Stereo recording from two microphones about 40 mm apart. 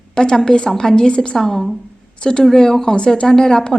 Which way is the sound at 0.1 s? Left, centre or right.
Centre.